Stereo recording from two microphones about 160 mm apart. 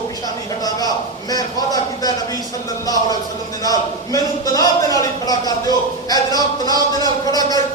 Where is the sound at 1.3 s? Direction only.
25° left (ahead or behind).